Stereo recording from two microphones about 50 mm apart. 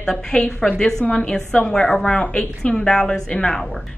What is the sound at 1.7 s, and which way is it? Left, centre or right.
Speech, centre.